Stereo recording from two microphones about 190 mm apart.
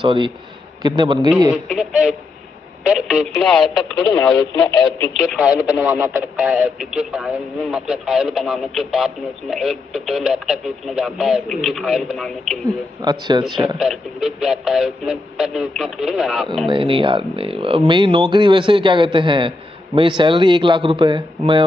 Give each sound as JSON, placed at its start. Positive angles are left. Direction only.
{"t": 0.0, "sound": "speech", "side_deg": -25}
{"t": 1.5, "sound": "speech", "side_deg": -5}
{"t": 13.0, "sound": "speech", "side_deg": -20}
{"t": 13.7, "sound": "speech", "side_deg": -5}
{"t": 16.6, "sound": "speech", "side_deg": -25}